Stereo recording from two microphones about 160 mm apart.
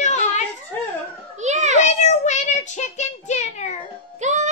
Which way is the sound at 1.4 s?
45° right (ahead or behind).